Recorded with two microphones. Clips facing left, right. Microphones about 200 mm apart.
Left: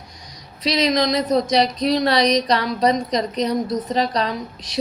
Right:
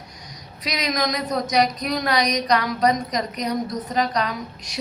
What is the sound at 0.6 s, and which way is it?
Speech, 30° left (ahead or behind).